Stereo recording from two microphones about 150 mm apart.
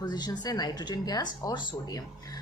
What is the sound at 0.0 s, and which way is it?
A woman's voice, 30° left (ahead or behind).